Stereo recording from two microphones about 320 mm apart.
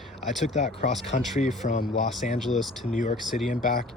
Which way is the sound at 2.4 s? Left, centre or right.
Centre.